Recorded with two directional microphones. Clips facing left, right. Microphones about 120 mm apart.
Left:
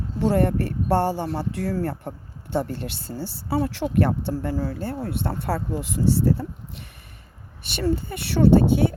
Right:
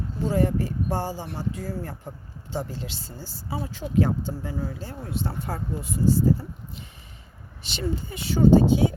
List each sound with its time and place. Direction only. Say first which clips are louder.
0.2 s speech: left 3 dB; 65° left (ahead or behind)
1.4 s speech: left 5 dB; 70° left (ahead or behind)
3.2 s speech: left 9 dB; 70° left (ahead or behind)
5.4 s speech: left 5 dB; 75° left (ahead or behind)
7.8 s speech: left 6 dB; 60° left (ahead or behind)